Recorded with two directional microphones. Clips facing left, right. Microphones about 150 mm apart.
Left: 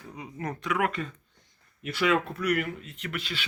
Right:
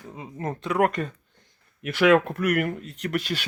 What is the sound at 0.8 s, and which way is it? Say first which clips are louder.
Speech: right 6 dB; 50° right (ahead or behind).